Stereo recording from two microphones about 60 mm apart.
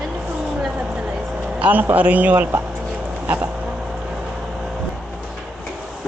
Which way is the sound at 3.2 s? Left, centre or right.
Right.